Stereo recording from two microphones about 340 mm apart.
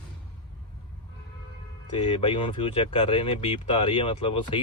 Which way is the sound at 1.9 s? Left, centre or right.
Centre.